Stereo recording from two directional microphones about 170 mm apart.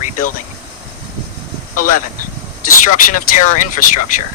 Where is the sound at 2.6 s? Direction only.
55° left (ahead or behind).